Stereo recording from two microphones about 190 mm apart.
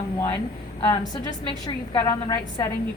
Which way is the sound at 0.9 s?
20° left (ahead or behind).